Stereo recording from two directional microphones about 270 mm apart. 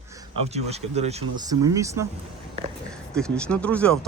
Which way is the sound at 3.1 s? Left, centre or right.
Centre.